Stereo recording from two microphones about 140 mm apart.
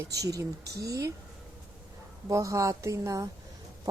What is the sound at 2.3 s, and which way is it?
Speech, 20° right (ahead or behind).